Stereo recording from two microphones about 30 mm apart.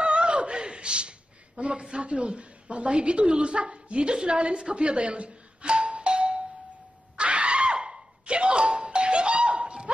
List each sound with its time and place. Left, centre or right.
0.0 s chuckle: right
1.8 s speech: right
2.1 s a woman's voice: right
7.2 s doorbell: right